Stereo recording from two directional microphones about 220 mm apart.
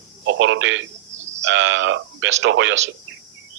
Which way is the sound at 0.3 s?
55° right (ahead or behind).